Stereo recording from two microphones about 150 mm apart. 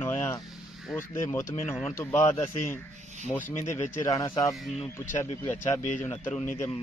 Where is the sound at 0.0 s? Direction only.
15° left (ahead or behind).